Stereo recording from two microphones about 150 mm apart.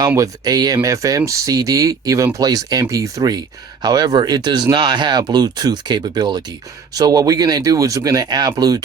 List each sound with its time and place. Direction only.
0.2 s speech: 25° right (ahead or behind)